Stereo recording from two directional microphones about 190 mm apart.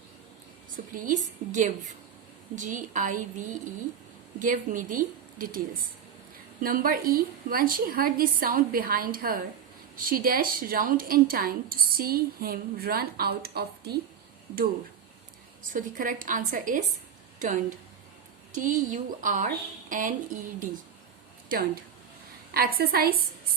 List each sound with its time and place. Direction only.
0.9 s a woman's voice: 45° right (ahead or behind)
15.7 s a woman's voice: 45° right (ahead or behind)
22.5 s a woman's voice: 55° right (ahead or behind)